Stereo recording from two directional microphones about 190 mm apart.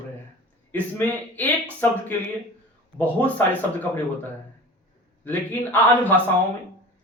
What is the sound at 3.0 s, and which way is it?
Speech, 10° left (ahead or behind).